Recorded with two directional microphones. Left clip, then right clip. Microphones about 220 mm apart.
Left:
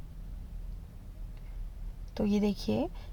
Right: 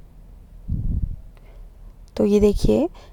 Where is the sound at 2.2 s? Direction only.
45° right (ahead or behind).